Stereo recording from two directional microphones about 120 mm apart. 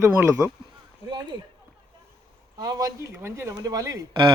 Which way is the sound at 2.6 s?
35° right (ahead or behind).